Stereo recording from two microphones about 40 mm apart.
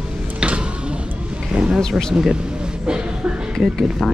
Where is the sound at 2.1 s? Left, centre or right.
Right.